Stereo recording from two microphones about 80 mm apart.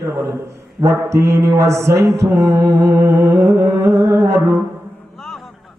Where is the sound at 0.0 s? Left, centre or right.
Right.